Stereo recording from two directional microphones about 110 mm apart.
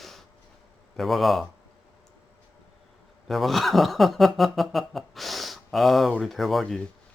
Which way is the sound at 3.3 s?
Centre (ahead or behind).